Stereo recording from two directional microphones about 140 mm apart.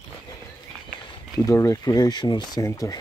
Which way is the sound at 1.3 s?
20° left (ahead or behind).